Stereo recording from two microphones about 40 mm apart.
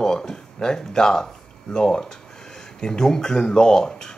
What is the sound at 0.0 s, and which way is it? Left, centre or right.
Speech, centre.